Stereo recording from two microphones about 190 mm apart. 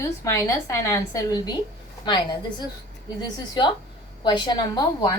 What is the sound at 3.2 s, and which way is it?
A woman's voice, 25° left (ahead or behind).